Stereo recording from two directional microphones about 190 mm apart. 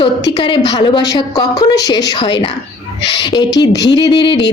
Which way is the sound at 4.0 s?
20° left (ahead or behind).